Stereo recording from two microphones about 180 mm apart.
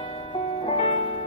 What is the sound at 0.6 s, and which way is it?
Music, 35° left (ahead or behind).